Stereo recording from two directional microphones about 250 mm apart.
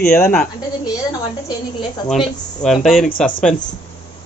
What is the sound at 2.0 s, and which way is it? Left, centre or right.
A man's voice, centre.